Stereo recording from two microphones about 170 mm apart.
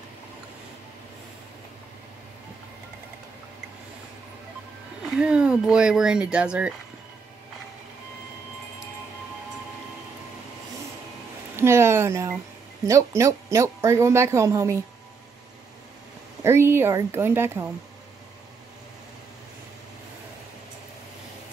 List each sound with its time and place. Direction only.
5.1 s speech: 5° right (ahead or behind)
11.5 s speech: 15° right (ahead or behind)
16.4 s speech: 15° right (ahead or behind)